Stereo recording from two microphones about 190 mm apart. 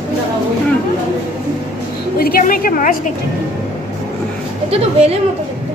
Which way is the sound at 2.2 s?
50° left (ahead or behind).